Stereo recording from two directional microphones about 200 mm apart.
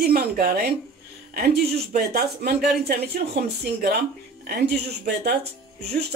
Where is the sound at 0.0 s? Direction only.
45° right (ahead or behind).